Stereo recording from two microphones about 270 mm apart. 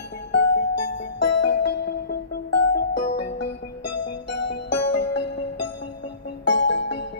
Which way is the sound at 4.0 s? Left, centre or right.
Left.